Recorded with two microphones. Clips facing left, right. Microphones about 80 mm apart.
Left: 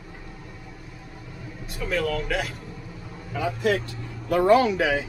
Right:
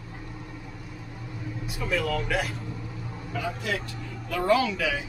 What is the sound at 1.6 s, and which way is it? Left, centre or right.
Speech, centre.